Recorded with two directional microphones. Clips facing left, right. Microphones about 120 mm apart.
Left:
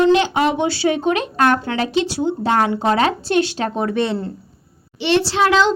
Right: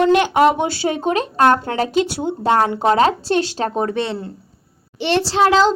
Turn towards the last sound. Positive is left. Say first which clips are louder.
# right 2 dB
turn(degrees=-35)  # may be behind; listen again after turning